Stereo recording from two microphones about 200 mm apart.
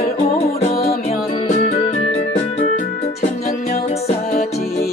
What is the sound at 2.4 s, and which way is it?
Music, 35° left (ahead or behind).